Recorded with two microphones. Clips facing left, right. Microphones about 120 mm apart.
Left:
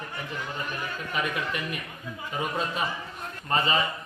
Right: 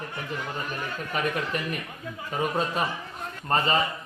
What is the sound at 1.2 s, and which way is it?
Speech, 45° right (ahead or behind).